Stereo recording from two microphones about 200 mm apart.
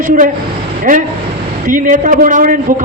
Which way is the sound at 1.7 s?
40° right (ahead or behind).